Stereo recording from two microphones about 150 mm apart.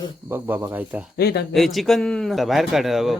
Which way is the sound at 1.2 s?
90° left.